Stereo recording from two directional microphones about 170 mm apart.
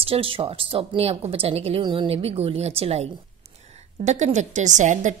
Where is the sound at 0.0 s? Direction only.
35° right (ahead or behind).